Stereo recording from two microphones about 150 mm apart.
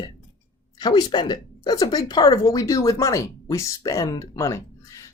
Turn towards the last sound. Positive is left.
turn(degrees=20)  # may be behind; listen again after turning